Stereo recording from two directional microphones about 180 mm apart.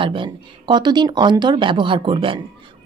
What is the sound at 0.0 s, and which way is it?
A woman's voice, 30° right (ahead or behind).